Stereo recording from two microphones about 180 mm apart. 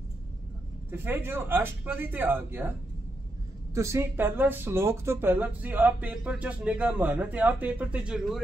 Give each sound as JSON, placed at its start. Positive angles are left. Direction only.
{"t": 0.9, "sound": "speech", "side_deg": -10}
{"t": 3.7, "sound": "speech", "side_deg": -15}